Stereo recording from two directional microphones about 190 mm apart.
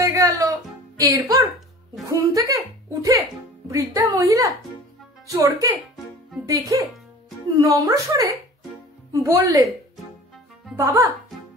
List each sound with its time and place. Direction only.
0.0 s music: 15° right (ahead or behind)
0.9 s speech: 15° right (ahead or behind)
10.8 s speech: 15° right (ahead or behind)